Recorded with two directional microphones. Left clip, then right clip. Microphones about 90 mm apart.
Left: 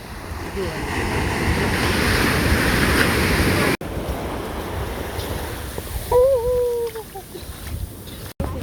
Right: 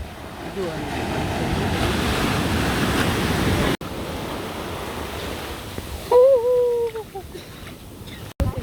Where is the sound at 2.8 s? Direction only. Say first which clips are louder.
Left 4 dB; 15° left (ahead or behind).